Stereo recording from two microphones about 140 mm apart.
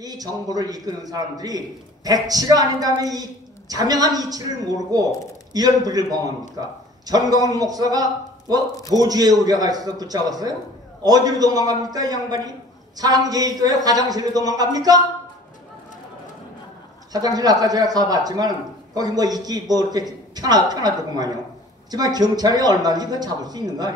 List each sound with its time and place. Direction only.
0.0 s a man's voice: 25° right (ahead or behind)
17.1 s a man's voice: 25° right (ahead or behind)